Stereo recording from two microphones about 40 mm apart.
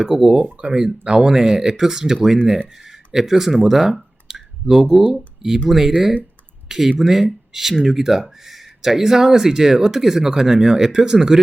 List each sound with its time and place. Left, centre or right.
0.0 s speech: centre
4.3 s clicking: centre
5.6 s speech: centre